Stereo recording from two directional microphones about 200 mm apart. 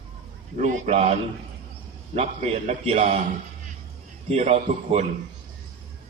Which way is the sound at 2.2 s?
35° right (ahead or behind).